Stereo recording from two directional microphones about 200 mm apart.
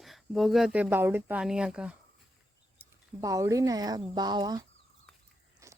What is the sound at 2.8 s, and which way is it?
Speech, 15° right (ahead or behind).